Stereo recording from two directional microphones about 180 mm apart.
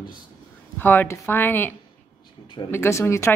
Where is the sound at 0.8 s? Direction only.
10° left (ahead or behind).